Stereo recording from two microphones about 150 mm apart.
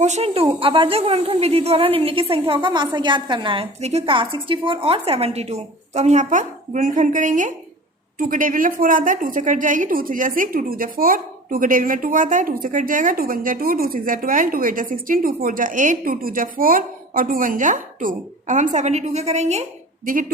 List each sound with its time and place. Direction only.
0.0 s a woman's voice: 45° right (ahead or behind)